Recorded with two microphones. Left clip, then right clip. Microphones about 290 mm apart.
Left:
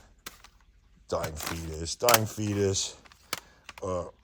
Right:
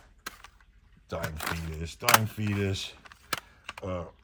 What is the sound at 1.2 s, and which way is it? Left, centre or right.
Speech, centre.